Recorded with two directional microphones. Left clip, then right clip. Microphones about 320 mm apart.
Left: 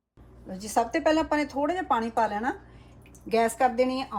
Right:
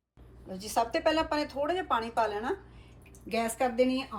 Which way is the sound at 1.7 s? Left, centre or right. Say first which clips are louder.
Left 2 dB; left.